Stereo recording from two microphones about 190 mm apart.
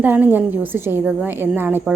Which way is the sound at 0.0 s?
10° right (ahead or behind).